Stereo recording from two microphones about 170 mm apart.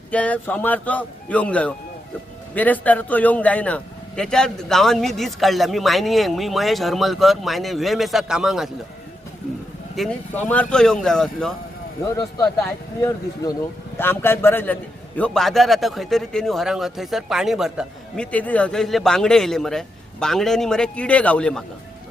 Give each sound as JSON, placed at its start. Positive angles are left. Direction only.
{"t": 0.1, "sound": "a man's voice", "side_deg": 10}
{"t": 9.9, "sound": "a man's voice", "side_deg": 0}
{"t": 13.0, "sound": "a man's voice", "side_deg": 20}
{"t": 18.3, "sound": "a man's voice", "side_deg": 10}